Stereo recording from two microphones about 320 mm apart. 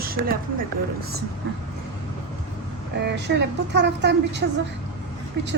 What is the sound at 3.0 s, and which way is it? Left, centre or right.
Speech, right.